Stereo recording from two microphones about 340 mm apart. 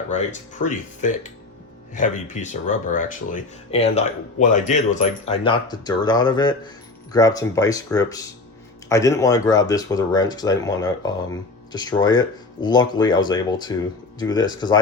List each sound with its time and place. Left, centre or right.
0.2 s speech: left